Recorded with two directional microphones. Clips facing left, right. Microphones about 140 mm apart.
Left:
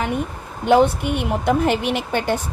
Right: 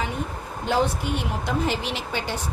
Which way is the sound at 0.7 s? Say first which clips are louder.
Left 8 dB; 60° left (ahead or behind).